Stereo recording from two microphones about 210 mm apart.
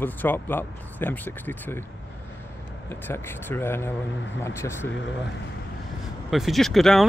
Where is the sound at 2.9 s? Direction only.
10° left (ahead or behind).